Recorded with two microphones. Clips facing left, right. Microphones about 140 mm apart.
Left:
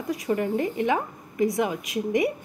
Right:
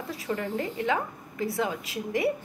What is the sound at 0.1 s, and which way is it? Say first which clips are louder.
A woman's voice: left 7 dB; 15° left (ahead or behind).